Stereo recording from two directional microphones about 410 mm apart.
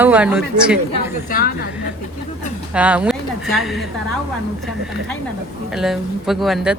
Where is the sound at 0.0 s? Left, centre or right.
Centre.